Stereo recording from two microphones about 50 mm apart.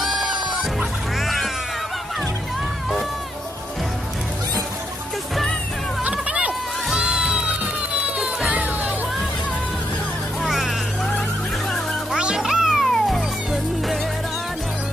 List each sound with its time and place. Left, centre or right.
0.0 s music: centre
6.0 s music: right
10.4 s music: centre
12.2 s music: centre
12.4 s music: centre
12.8 s music: centre